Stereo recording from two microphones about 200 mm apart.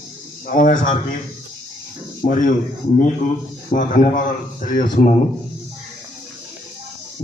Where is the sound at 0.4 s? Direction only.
40° left (ahead or behind).